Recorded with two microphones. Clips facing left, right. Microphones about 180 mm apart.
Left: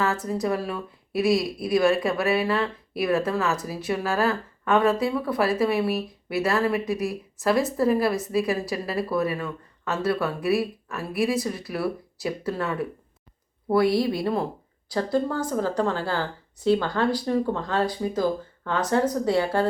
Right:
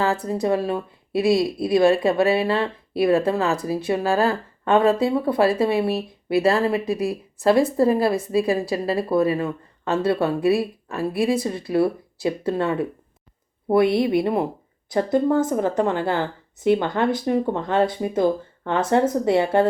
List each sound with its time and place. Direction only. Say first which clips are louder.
0.4 s speech: right 7 dB; 25° right (ahead or behind)